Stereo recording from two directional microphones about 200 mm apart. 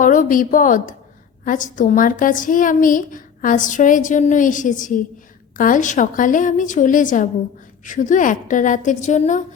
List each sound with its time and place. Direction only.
0.0 s a woman's voice: 40° left (ahead or behind)